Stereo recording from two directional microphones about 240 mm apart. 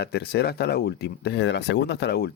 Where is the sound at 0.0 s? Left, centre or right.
Left.